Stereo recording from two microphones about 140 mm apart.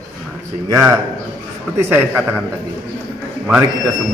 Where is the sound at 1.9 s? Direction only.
10° right (ahead or behind).